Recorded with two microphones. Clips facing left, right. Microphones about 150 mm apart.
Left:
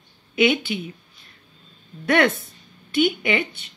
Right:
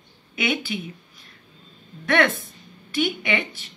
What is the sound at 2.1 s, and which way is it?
A woman's voice, 30° left (ahead or behind).